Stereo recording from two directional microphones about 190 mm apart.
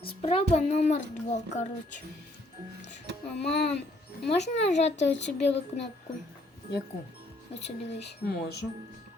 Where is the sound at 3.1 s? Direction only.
65° right (ahead or behind).